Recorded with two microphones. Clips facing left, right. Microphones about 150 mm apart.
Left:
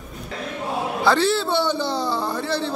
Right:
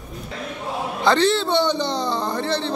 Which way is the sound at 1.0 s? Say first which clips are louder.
Right 2 dB; 5° left (ahead or behind).